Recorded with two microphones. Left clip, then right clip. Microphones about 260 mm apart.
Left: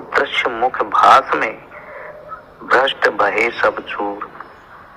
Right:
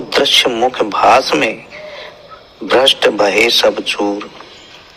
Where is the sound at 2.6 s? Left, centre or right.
Right.